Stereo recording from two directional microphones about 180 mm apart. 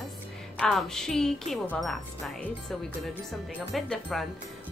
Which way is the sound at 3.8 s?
Centre (ahead or behind).